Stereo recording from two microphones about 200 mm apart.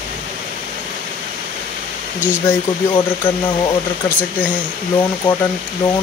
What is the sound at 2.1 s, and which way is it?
Speech, 5° right (ahead or behind).